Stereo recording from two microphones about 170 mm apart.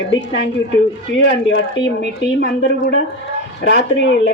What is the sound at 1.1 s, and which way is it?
Speech, 90° left.